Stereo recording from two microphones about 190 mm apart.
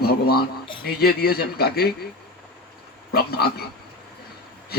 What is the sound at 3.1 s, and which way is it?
Speech, 55° left (ahead or behind).